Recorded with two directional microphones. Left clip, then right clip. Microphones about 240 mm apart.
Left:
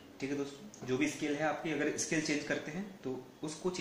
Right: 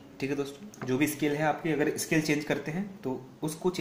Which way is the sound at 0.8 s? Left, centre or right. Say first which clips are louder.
Right 6 dB; right.